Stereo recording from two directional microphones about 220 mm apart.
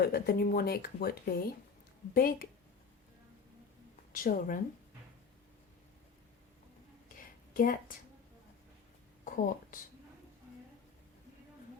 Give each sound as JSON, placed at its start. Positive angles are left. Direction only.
{"t": 0.0, "sound": "a woman's voice", "side_deg": 45}
{"t": 4.2, "sound": "a woman's voice", "side_deg": 40}
{"t": 7.1, "sound": "a sound", "side_deg": 40}
{"t": 9.2, "sound": "a woman's voice", "side_deg": 40}